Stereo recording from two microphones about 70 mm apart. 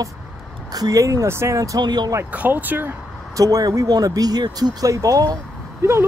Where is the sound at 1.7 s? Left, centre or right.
Right.